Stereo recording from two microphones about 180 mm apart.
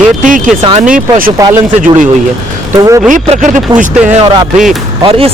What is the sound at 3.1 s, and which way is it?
Speech, 45° right (ahead or behind).